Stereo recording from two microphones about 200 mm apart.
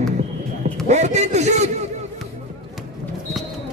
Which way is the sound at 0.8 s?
35° right (ahead or behind).